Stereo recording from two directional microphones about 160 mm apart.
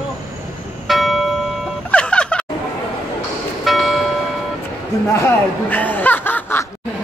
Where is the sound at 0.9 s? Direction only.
Centre (ahead or behind).